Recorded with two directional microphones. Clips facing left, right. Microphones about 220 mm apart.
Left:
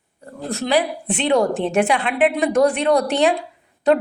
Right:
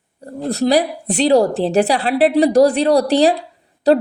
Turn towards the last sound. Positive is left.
turn(degrees=-35)  # may be behind; listen again after turning